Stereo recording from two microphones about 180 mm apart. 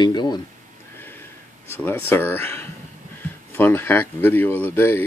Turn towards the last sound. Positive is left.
turn(degrees=10)  # may be behind; listen again after turning